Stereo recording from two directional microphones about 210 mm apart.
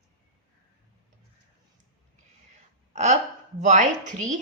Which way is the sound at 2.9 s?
35° right (ahead or behind).